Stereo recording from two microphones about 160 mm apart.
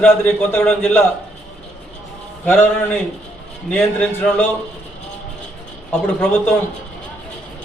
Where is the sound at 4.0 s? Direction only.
5° left (ahead or behind).